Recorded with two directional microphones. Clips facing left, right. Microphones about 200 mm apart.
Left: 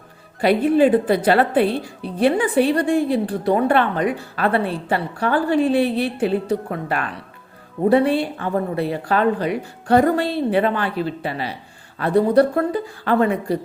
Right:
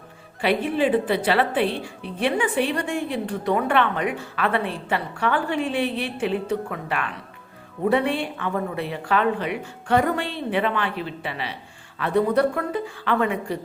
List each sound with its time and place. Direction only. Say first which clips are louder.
0.4 s speech: left 6 dB; 40° left (ahead or behind)